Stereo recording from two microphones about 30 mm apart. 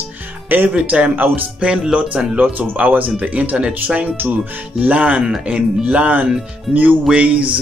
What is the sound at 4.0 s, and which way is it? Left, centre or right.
Speech, right.